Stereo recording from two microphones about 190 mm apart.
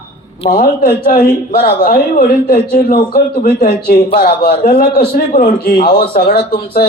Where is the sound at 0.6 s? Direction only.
40° left (ahead or behind); by 4.0 s 55° left (ahead or behind).